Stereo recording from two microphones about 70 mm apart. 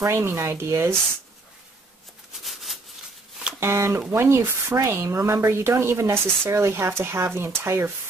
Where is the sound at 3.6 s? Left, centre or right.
Right.